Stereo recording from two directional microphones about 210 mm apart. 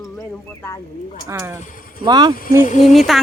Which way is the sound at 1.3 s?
15° right (ahead or behind).